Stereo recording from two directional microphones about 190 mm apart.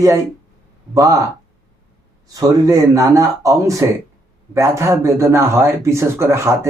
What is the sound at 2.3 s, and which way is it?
Speech, 15° right (ahead or behind).